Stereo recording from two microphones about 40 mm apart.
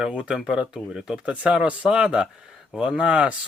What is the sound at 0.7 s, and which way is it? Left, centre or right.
Speech, centre.